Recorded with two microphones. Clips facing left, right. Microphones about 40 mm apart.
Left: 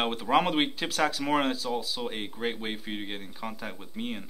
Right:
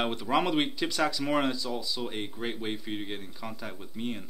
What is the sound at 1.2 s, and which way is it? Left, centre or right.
Speech, centre.